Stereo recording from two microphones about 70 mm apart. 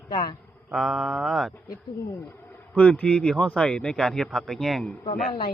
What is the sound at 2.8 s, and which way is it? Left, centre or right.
Speech, centre.